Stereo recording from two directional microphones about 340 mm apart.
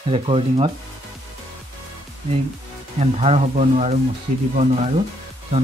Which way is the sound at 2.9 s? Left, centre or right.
Centre.